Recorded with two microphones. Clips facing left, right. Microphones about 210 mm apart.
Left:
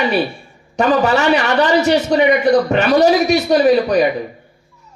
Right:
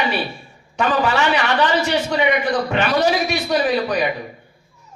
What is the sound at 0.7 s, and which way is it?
Speech, 40° left (ahead or behind).